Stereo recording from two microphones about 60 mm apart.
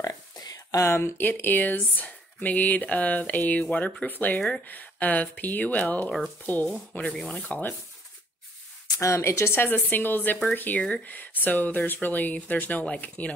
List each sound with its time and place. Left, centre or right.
0.8 s speech: left
1.2 s speech: left
8.9 s speech: left; by 13.3 s centre